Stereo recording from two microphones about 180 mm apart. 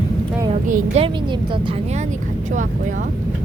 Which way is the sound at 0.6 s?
45° right (ahead or behind).